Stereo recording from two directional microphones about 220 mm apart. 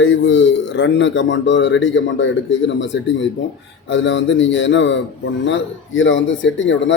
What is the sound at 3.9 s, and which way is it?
A man's voice, 55° left (ahead or behind).